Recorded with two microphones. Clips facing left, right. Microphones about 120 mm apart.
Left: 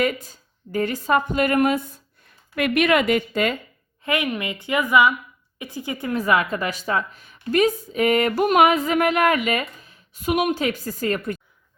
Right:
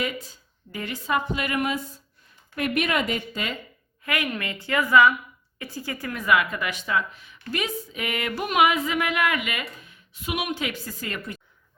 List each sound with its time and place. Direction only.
0.7 s a woman's voice: 45° left (ahead or behind)
2.6 s a woman's voice: 75° left (ahead or behind)
4.0 s a woman's voice: 20° left (ahead or behind)
5.5 s music: 20° left (ahead or behind); by 11.3 s 40° left (ahead or behind)